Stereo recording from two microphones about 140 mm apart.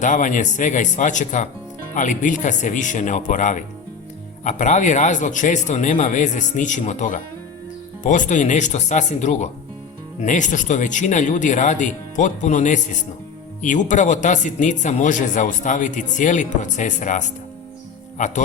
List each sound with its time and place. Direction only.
0.0 s speech: 65° left (ahead or behind)